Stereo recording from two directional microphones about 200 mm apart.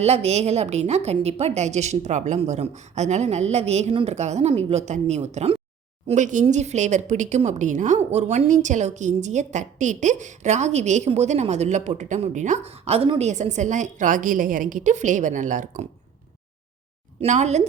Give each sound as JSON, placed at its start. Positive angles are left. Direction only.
{"t": 0.0, "sound": "speech", "side_deg": -30}
{"t": 17.2, "sound": "speech", "side_deg": -35}